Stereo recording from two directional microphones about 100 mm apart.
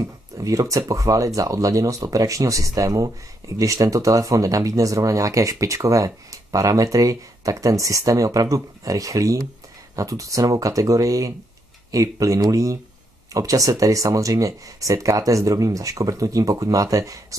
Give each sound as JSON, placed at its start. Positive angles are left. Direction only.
{"t": 0.0, "sound": "speech", "side_deg": -35}